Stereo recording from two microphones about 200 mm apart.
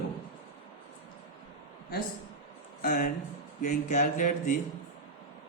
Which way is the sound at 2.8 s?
40° left (ahead or behind).